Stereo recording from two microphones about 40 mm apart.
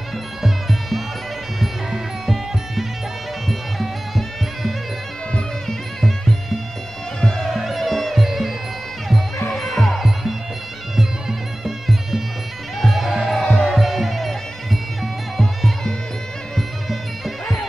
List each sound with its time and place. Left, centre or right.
0.4 s music: centre
7.2 s music: centre
7.4 s music: centre